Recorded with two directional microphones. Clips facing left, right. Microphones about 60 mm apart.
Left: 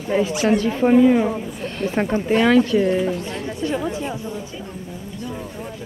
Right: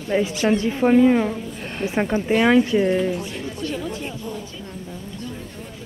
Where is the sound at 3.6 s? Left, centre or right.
Left.